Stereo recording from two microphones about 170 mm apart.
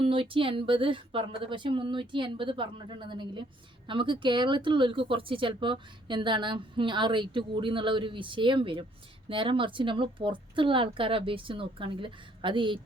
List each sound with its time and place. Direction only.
0.0 s a woman's voice: 30° right (ahead or behind)